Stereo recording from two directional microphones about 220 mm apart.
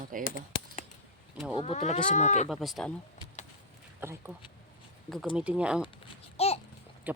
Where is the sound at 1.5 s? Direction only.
30° left (ahead or behind).